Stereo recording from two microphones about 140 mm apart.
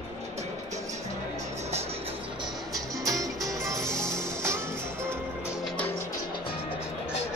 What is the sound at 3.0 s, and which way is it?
Music, 25° right (ahead or behind).